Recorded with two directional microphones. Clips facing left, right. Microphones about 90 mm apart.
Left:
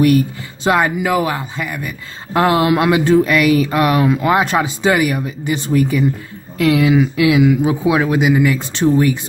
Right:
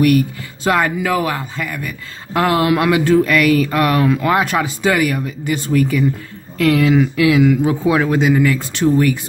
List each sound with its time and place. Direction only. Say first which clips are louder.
0.7 s speech: left 1 dB; 20° left (ahead or behind)